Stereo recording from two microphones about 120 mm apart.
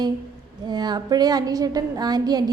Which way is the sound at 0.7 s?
35° right (ahead or behind).